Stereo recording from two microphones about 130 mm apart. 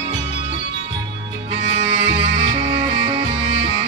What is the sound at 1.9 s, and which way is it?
Music, 40° right (ahead or behind).